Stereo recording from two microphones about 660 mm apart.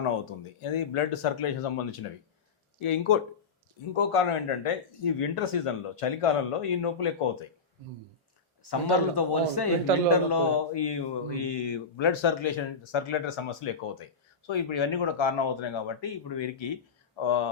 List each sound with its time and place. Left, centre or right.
0.6 s speech: left
8.7 s a man's voice: left